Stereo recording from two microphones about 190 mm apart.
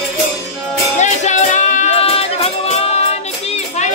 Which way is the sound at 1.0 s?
40° left (ahead or behind).